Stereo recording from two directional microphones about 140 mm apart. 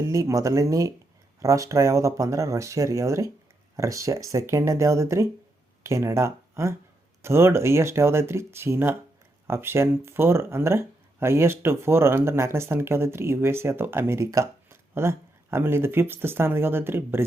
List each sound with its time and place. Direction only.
0.0 s speech: 20° right (ahead or behind)